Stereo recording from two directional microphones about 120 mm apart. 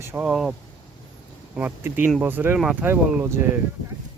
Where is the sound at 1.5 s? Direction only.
15° right (ahead or behind).